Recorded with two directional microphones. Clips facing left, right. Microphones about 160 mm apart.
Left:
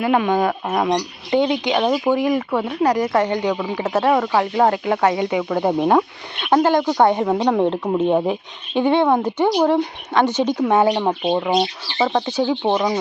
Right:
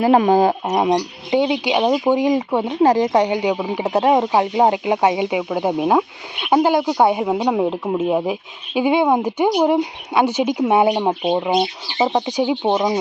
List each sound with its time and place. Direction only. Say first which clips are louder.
0.0 s speech: right 4 dB; 35° right (ahead or behind)
0.7 s speech: right 2 dB; 20° right (ahead or behind)